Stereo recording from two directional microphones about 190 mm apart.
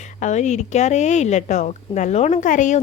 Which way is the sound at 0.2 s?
40° left (ahead or behind).